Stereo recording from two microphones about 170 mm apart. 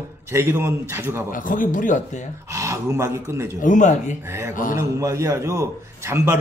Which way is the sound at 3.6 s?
50° left (ahead or behind).